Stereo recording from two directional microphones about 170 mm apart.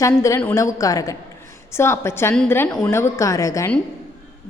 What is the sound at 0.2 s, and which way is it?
A woman's voice, 15° left (ahead or behind).